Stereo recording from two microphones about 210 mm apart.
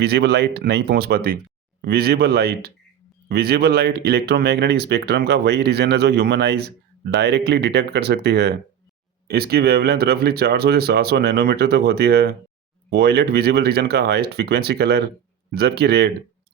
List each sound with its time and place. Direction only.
0.0 s speech: 50° right (ahead or behind)